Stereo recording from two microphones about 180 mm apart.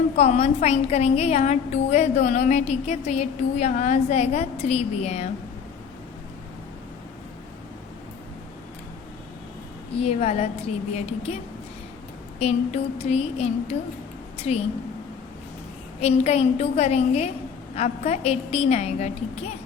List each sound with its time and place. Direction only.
0.2 s a woman's voice: 35° left (ahead or behind)
10.0 s a woman's voice: 35° left (ahead or behind)
12.4 s a woman's voice: 35° left (ahead or behind)
16.0 s a woman's voice: 35° left (ahead or behind)